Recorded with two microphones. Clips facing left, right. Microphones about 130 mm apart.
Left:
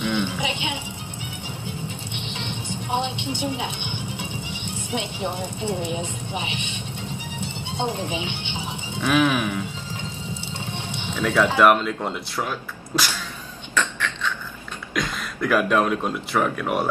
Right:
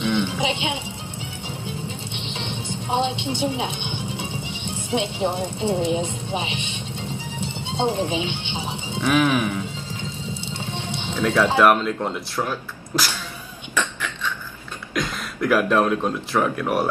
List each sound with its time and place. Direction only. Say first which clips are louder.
0.2 s music: right 3 dB; 15° right (ahead or behind)
2.4 s speech: right 2 dB; 15° right (ahead or behind)
7.7 s speech: right 5 dB; 15° right (ahead or behind)
10.7 s music: right 2 dB; 15° right (ahead or behind)
11.5 s speech: even; centre (ahead or behind)
13.7 s a sound: left 1 dB; 10° right (ahead or behind)
15.0 s speech: right 1 dB; centre (ahead or behind)